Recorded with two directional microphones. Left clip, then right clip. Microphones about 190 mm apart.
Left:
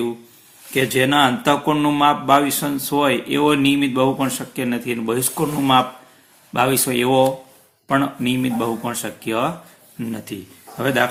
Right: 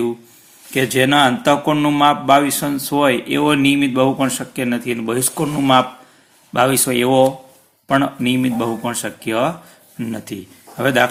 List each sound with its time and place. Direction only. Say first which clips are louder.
0.7 s speech: right 2 dB; 25° right (ahead or behind)